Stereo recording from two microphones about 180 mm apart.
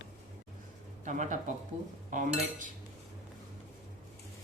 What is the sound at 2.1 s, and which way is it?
Cutlery, 45° right (ahead or behind).